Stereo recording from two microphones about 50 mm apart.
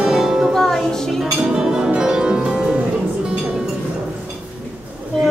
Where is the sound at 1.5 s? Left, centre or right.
Centre.